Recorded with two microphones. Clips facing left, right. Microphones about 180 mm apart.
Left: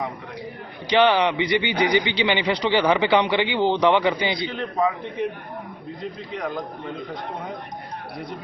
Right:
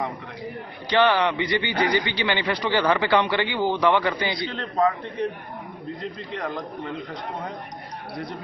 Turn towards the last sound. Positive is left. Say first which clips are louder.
# left 1 dB
turn(degrees=0)  # may be behind; listen again after turning